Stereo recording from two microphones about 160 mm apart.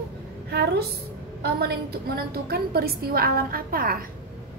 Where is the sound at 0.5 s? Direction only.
90° right.